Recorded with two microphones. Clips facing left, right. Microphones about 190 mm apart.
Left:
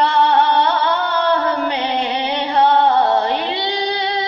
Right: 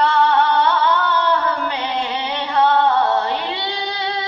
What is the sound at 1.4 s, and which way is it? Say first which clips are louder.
Music: left 3 dB; 20° left (ahead or behind).